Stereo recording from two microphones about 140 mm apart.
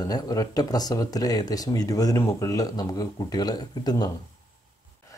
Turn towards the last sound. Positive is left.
turn(degrees=30)  # may be behind; listen again after turning